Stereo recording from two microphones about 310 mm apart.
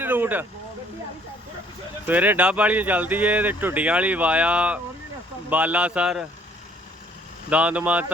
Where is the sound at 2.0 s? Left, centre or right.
Centre.